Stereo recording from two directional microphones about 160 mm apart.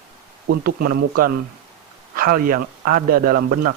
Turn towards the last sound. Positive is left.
turn(degrees=-70)  # may be behind; listen again after turning